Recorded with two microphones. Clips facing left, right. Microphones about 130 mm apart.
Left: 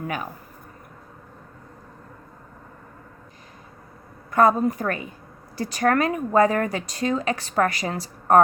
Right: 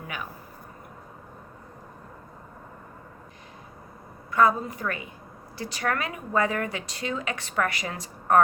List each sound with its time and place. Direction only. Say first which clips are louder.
4.3 s a woman's voice: left 4 dB; 45° left (ahead or behind)